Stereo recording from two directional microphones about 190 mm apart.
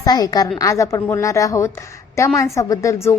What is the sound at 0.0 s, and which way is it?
A woman's voice, 20° left (ahead or behind).